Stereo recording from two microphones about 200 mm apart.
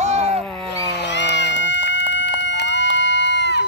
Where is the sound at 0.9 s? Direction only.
60° left (ahead or behind).